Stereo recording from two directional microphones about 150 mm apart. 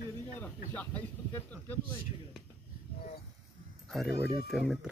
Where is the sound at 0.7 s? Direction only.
10° left (ahead or behind).